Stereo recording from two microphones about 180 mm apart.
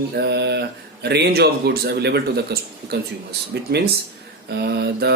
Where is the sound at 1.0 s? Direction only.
65° right (ahead or behind).